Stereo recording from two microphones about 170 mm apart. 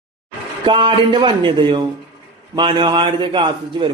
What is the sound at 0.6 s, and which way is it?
A man's voice, 30° right (ahead or behind).